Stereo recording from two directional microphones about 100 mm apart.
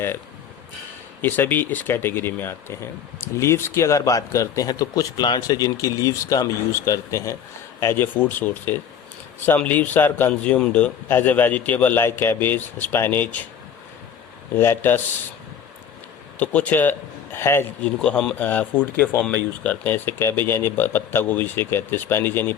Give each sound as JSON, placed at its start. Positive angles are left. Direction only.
{"t": 1.2, "sound": "a man's voice", "side_deg": 20}
{"t": 14.5, "sound": "speech", "side_deg": 25}
{"t": 16.4, "sound": "a man's voice", "side_deg": 15}
{"t": 17.8, "sound": "a man's voice", "side_deg": 10}